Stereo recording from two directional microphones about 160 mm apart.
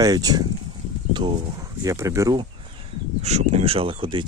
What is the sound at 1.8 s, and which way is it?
Speech, 20° right (ahead or behind).